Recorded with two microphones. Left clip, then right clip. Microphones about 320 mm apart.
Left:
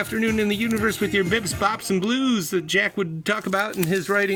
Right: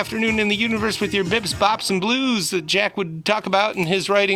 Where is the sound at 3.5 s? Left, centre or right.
Centre.